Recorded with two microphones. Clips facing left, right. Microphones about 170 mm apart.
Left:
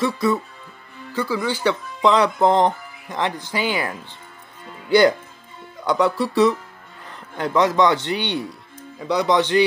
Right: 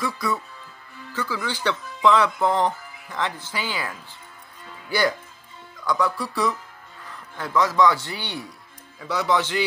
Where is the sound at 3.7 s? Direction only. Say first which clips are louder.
Left 6 dB; 60° left (ahead or behind).